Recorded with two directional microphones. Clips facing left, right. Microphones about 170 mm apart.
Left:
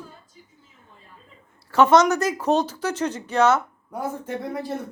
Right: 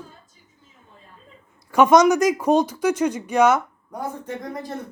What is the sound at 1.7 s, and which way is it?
Speech, 15° right (ahead or behind).